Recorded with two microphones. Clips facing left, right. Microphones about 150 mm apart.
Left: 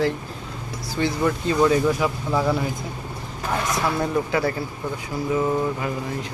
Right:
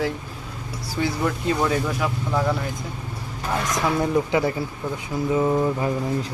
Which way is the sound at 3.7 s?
15° right (ahead or behind).